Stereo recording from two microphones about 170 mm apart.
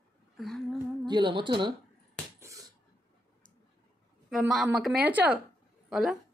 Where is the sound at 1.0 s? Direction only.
25° right (ahead or behind).